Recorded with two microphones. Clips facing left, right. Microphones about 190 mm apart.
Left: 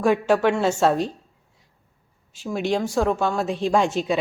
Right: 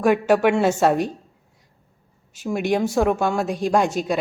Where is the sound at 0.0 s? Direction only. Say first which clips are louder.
Right 2 dB; 5° right (ahead or behind).